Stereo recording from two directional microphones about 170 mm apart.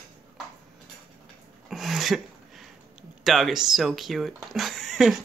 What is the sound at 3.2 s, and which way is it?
Speech, centre (ahead or behind).